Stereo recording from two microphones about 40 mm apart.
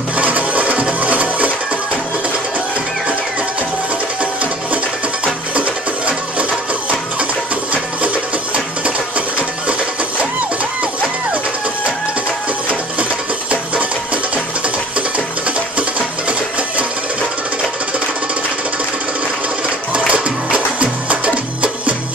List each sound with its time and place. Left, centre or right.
0.2 s music: right
13.5 s music: right
16.3 s music: right
19.9 s music: right